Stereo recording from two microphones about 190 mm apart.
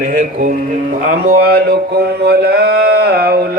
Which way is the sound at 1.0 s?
50° right (ahead or behind).